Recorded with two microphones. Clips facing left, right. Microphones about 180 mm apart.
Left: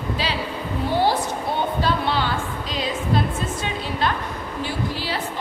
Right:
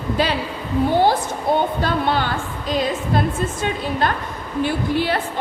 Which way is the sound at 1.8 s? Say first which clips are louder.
Right 2 dB; 50° right (ahead or behind).